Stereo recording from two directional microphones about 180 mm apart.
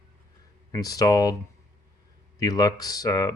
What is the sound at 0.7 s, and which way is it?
Speech, 20° left (ahead or behind).